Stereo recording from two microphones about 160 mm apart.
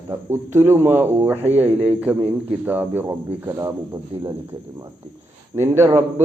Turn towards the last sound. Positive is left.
turn(degrees=-15)  # may be behind; listen again after turning